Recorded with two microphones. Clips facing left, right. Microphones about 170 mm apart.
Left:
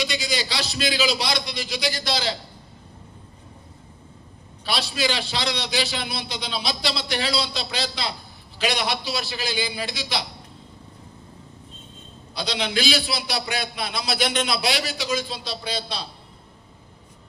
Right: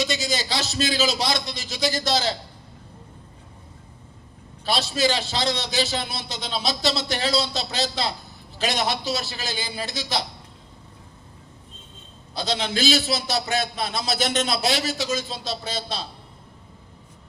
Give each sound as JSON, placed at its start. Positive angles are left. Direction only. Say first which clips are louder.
{"t": 0.0, "sound": "a man's voice", "louder": "right 1 dB", "side_deg": -45}
{"t": 4.8, "sound": "a man's voice", "louder": "right 3 dB", "side_deg": -45}
{"t": 12.4, "sound": "a man's voice", "louder": "right 1 dB", "side_deg": -45}